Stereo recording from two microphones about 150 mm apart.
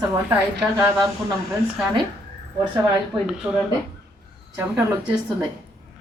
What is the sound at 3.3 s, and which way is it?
Speech, 5° right (ahead or behind).